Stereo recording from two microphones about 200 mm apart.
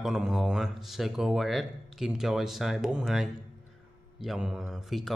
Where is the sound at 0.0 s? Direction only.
Centre (ahead or behind).